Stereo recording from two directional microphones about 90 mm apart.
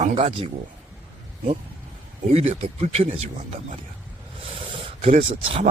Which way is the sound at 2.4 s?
90° right.